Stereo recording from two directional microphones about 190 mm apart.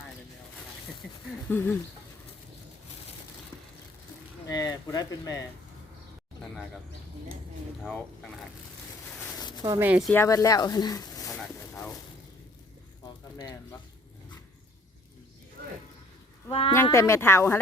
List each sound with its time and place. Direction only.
1.5 s speech: 10° left (ahead or behind)
4.4 s speech: 20° left (ahead or behind)
7.9 s speech: 5° left (ahead or behind)
9.6 s speech: 10° right (ahead or behind)
10.1 s speech: 15° left (ahead or behind)
11.3 s a sound: 10° left (ahead or behind)
13.3 s speech: 20° left (ahead or behind)
16.5 s speech: 30° left (ahead or behind)
16.7 s speech: 15° left (ahead or behind)